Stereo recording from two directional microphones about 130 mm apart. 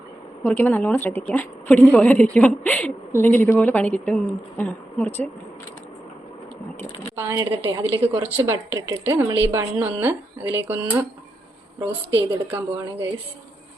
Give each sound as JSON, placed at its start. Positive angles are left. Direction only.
{"t": 0.4, "sound": "a woman's voice", "side_deg": 10}
{"t": 7.2, "sound": "a woman's voice", "side_deg": -20}
{"t": 12.5, "sound": "a woman's voice", "side_deg": -15}